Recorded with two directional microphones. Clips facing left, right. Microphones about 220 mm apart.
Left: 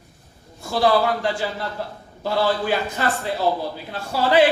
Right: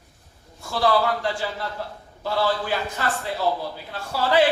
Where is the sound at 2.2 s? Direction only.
20° left (ahead or behind).